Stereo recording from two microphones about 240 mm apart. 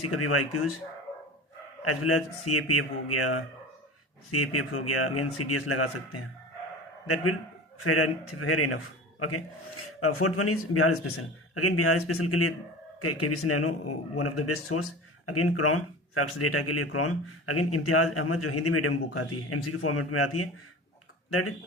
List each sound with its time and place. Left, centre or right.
0.0 s speech: left
1.8 s speech: left
7.8 s a man's voice: left